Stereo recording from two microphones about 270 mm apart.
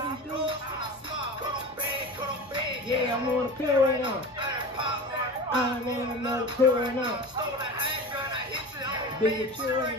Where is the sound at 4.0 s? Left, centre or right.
Centre.